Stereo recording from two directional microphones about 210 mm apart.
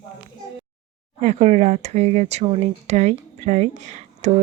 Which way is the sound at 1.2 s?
35° right (ahead or behind).